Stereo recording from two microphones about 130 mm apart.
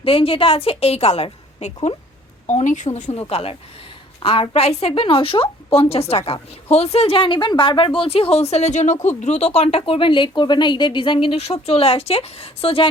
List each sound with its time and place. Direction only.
0.0 s a woman's voice: 45° left (ahead or behind)
2.5 s a woman's voice: 65° left (ahead or behind); by 12.9 s 45° left (ahead or behind)